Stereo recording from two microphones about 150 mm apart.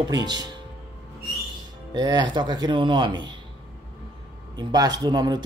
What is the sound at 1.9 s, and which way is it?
Speech, 25° right (ahead or behind).